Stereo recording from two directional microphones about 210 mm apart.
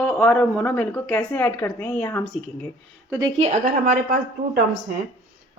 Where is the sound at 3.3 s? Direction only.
30° right (ahead or behind).